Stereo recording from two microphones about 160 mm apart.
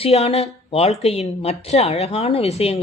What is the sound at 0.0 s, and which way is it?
Speech, 40° left (ahead or behind).